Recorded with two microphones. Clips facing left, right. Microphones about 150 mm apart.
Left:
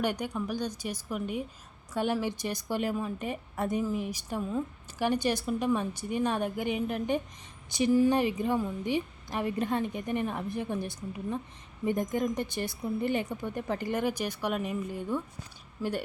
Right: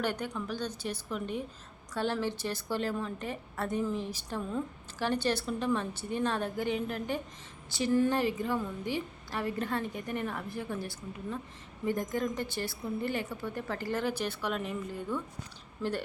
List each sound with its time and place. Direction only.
0.0 s a woman's voice: 15° left (ahead or behind)